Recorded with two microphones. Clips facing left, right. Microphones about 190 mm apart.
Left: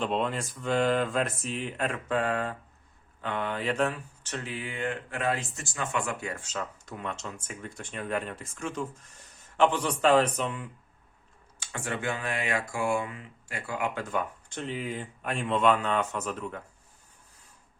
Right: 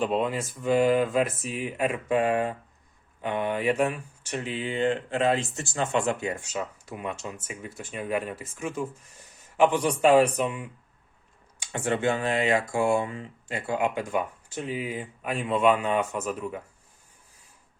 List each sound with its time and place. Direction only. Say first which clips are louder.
0.0 s speech: right 3 dB; 5° right (ahead or behind); by 6.4 s 20° right (ahead or behind)
6.4 s speech: right 3 dB; 10° right (ahead or behind)
11.6 s speech: right 7 dB; 20° right (ahead or behind)